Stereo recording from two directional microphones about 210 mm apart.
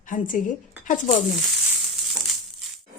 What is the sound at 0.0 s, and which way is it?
Speech, 40° left (ahead or behind).